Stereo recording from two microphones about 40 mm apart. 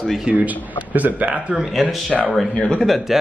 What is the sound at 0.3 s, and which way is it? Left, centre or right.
A man's voice, right.